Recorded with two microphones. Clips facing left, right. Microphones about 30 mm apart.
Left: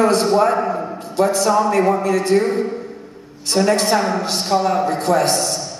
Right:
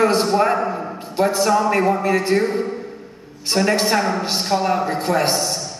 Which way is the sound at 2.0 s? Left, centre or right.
Centre.